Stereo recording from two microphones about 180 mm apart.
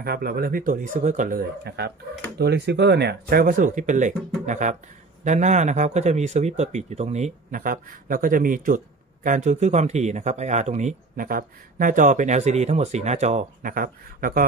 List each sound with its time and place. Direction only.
0.0 s speech: 60° right (ahead or behind)